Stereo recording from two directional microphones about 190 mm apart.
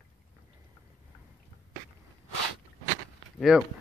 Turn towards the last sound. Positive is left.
turn(degrees=0)  # may be behind; listen again after turning